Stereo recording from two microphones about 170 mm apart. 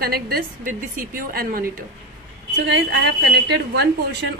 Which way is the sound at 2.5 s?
90° right.